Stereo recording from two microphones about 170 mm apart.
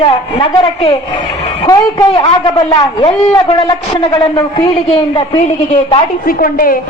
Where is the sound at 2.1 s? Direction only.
25° left (ahead or behind).